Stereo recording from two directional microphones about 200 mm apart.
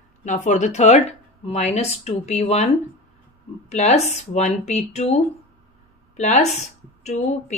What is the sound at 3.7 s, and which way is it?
Speech, 35° left (ahead or behind).